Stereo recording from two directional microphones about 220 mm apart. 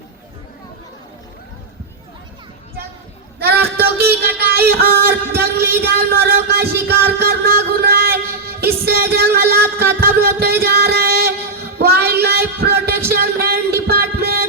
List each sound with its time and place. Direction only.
3.4 s a sound: 45° right (ahead or behind)
5.4 s music: 45° right (ahead or behind)
11.8 s child singing: 45° right (ahead or behind)
13.1 s music: 45° right (ahead or behind)